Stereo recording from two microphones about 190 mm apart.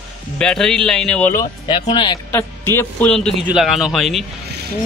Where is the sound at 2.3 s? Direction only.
10° left (ahead or behind).